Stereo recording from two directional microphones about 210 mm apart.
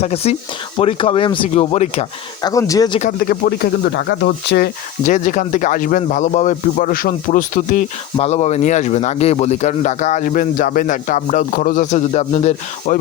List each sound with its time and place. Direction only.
0.0 s speech: 30° left (ahead or behind)
2.4 s speech: 15° left (ahead or behind)
3.0 s speech: 45° left (ahead or behind)
5.0 s speech: 35° left (ahead or behind)